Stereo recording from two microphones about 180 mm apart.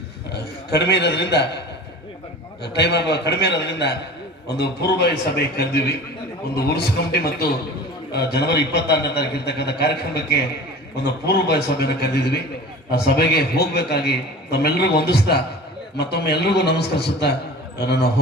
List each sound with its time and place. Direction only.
0.3 s a man's voice: 65° left (ahead or behind)
2.6 s a man's voice: 65° left (ahead or behind)